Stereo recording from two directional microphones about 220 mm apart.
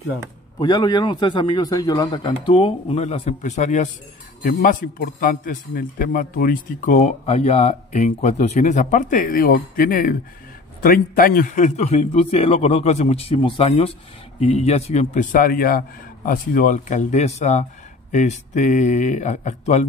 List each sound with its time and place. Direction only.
0.6 s a man's voice: 20° left (ahead or behind)